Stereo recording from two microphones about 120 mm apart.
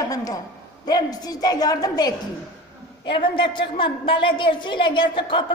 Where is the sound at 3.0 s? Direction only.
45° left (ahead or behind).